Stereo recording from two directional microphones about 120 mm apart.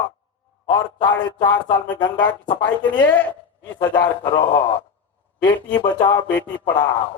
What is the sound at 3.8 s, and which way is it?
A man's voice, 45° left (ahead or behind).